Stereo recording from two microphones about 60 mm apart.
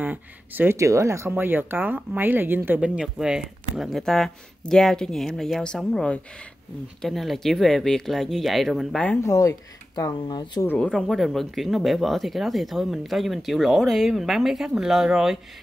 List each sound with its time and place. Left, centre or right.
0.0 s speech: right
0.7 s speech: right
1.3 s speech: right
2.8 s speech: centre
4.0 s speech: centre
8.9 s speech: left
9.3 s speech: left
10.6 s speech: left
11.1 s speech: centre